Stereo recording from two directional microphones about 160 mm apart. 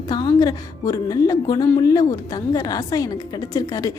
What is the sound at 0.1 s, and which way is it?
A woman's voice, 25° left (ahead or behind).